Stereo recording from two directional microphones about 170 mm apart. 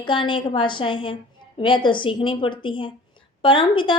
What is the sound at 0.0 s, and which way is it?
A woman's voice, 30° left (ahead or behind).